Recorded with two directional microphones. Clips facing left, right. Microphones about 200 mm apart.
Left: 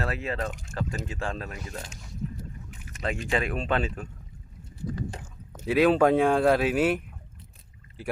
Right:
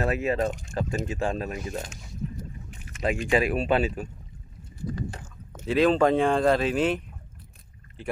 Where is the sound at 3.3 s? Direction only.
10° right (ahead or behind).